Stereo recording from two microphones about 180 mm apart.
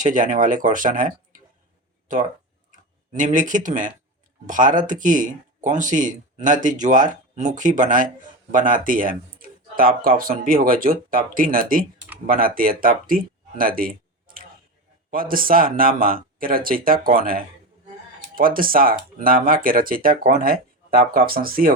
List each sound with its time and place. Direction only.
0.0 s speech: 45° right (ahead or behind)
3.1 s speech: 45° right (ahead or behind)